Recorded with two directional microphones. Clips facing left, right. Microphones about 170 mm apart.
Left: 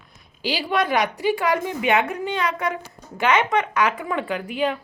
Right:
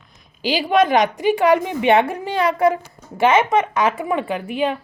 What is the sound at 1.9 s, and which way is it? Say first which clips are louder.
A woman's voice: right 5 dB; 30° right (ahead or behind).